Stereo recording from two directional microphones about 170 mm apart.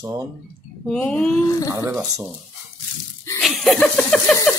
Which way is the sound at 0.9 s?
5° left (ahead or behind).